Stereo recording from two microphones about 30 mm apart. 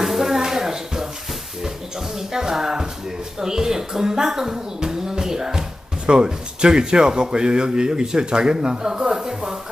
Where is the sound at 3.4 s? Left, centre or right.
Centre.